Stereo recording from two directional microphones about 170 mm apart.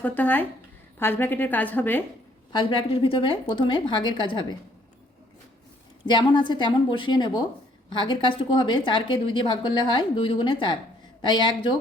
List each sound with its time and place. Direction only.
0.0 s a woman's voice: 10° left (ahead or behind)
2.5 s speech: 30° left (ahead or behind)
6.1 s speech: 25° left (ahead or behind)